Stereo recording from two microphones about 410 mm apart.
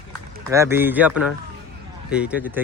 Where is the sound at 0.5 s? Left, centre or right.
Centre.